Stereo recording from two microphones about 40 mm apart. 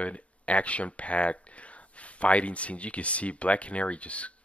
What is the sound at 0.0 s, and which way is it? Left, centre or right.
Speech, left.